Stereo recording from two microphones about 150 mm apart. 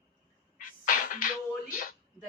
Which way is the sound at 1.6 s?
65° left (ahead or behind).